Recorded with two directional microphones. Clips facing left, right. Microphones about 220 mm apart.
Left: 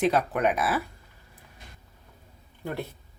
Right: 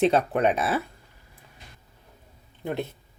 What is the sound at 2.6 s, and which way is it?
Speech, 20° right (ahead or behind).